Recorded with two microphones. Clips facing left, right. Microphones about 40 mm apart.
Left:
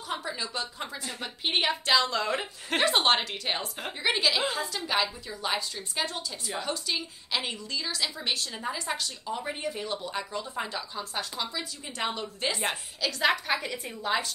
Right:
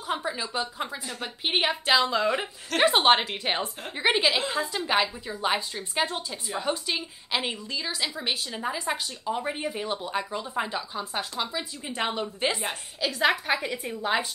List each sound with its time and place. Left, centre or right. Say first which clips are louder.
0.1 s a woman's voice: right 4 dB; centre